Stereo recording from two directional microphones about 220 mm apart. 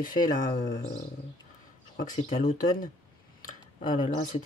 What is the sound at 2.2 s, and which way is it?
Speech, 30° left (ahead or behind).